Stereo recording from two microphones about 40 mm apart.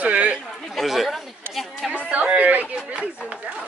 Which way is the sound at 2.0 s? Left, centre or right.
Right.